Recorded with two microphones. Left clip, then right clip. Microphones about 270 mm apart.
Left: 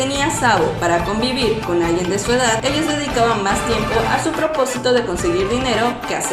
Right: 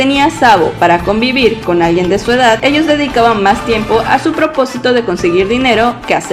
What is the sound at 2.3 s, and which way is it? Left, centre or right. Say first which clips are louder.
Speech: right 8 dB; right.